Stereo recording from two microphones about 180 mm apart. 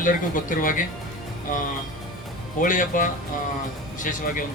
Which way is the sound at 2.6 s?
50° left (ahead or behind).